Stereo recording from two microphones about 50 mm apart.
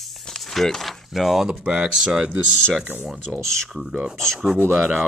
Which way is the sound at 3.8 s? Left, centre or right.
Centre.